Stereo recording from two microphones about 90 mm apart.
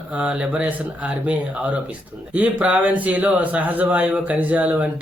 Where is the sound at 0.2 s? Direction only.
10° right (ahead or behind).